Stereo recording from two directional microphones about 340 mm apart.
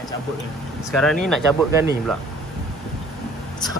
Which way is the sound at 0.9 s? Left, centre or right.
Centre.